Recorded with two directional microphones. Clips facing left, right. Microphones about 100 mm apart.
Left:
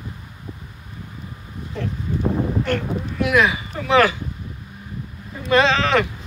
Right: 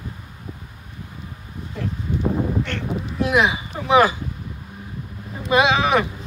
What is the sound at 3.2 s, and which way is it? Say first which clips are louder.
Speech: left 1 dB; 20° right (ahead or behind).